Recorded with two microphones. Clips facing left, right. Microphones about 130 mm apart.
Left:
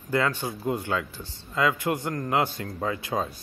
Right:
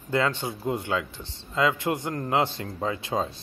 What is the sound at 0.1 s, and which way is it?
A man's voice, 25° right (ahead or behind).